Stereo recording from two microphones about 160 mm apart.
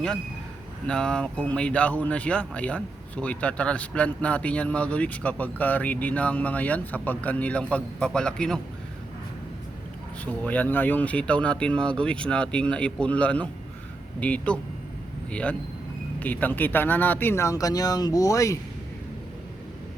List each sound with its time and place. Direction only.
0.9 s speech: 5° left (ahead or behind)
10.4 s speech: 10° left (ahead or behind)